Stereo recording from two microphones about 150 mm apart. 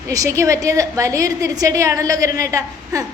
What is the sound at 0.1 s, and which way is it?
A woman's voice, 20° right (ahead or behind).